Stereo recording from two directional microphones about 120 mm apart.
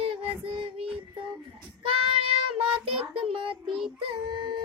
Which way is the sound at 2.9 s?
55° right (ahead or behind).